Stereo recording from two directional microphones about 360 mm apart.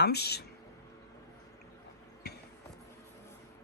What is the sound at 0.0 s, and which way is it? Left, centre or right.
Speech, left.